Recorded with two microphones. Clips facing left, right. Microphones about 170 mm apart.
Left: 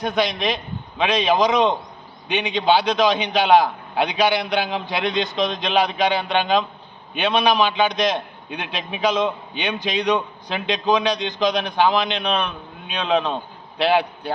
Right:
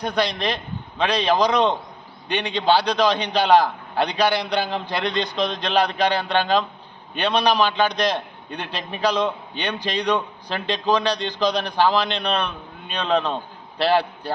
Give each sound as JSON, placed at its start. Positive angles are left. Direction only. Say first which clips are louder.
{"t": 0.0, "sound": "a man's voice", "louder": "left 1 dB", "side_deg": 0}